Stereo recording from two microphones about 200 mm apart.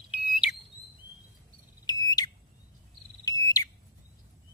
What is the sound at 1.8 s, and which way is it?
Smoke detector, 20° left (ahead or behind).